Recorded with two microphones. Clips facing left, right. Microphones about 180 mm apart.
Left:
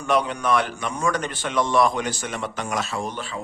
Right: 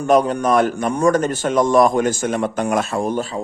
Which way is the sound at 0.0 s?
45° right (ahead or behind).